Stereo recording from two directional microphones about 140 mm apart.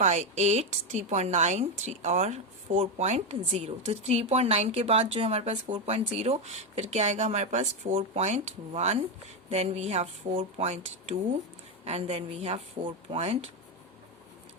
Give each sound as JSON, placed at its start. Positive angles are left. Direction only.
{"t": 0.0, "sound": "a woman's voice", "side_deg": -55}